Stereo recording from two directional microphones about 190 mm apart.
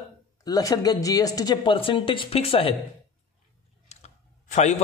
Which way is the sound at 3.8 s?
35° left (ahead or behind).